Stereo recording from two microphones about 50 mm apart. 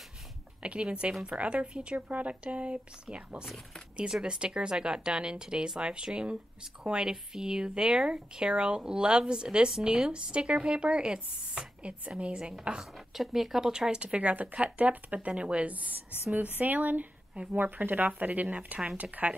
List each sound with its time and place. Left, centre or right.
0.6 s speech: right
13.1 s speech: centre; by 19.3 s right